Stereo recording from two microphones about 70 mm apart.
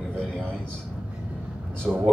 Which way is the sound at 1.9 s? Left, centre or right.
Centre.